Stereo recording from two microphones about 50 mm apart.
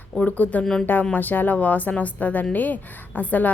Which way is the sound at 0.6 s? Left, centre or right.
Centre.